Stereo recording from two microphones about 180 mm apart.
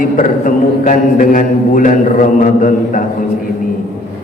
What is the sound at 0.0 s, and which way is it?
A man's voice, 45° left (ahead or behind).